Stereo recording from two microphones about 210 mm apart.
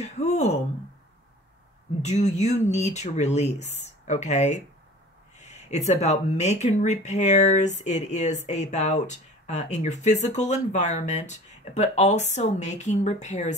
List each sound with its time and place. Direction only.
0.0 s speech: 30° left (ahead or behind)
2.0 s speech: 35° left (ahead or behind)